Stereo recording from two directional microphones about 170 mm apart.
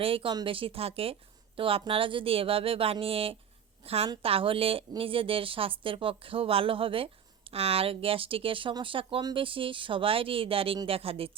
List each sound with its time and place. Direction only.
0.0 s speech: 30° right (ahead or behind)